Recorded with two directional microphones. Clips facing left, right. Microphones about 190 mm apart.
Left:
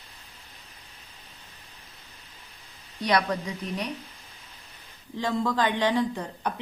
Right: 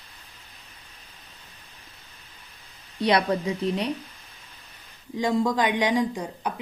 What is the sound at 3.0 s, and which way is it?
Speech, 25° right (ahead or behind).